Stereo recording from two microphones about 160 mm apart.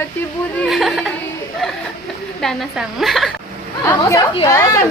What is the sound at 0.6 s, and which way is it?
A woman's voice, centre (ahead or behind).